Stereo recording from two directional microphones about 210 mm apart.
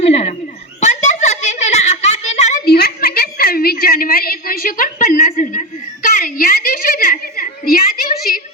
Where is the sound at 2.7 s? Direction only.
50° left (ahead or behind).